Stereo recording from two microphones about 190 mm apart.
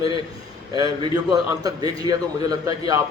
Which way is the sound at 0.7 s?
20° right (ahead or behind).